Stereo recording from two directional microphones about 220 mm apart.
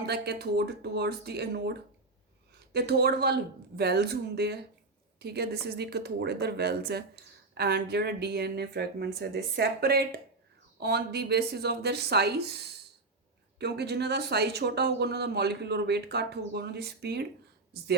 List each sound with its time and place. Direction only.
0.1 s speech: 45° right (ahead or behind)
2.7 s speech: 50° right (ahead or behind)